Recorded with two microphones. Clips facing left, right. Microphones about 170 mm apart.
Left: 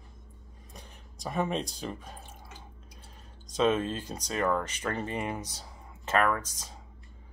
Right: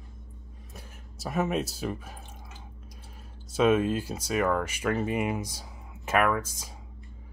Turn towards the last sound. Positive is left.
turn(degrees=-10)  # may be behind; listen again after turning